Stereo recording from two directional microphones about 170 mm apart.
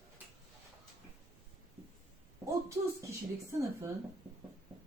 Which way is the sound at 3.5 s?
15° right (ahead or behind).